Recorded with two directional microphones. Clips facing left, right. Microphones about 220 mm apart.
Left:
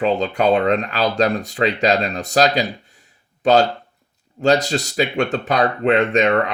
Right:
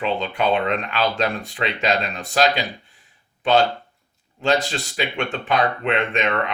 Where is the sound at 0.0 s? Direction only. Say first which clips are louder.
Left 5 dB; 40° left (ahead or behind).